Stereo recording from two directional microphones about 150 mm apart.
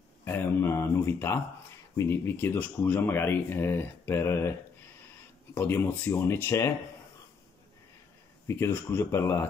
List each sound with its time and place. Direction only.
0.2 s speech: 15° left (ahead or behind)
8.5 s speech: 15° left (ahead or behind)